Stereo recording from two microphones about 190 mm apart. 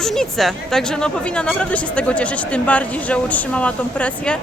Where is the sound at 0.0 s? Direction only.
Centre (ahead or behind).